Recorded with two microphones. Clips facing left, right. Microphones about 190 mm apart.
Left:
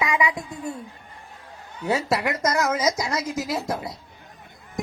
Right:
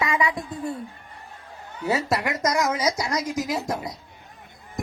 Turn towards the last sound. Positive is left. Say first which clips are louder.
# even
turn(degrees=0)  # may be behind; listen again after turning